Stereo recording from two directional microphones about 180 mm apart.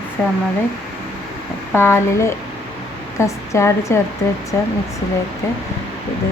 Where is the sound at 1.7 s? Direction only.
15° left (ahead or behind).